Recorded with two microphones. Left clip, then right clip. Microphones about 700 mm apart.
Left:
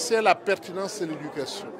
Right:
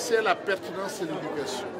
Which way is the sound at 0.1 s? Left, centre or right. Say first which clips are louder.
Left 3 dB; left.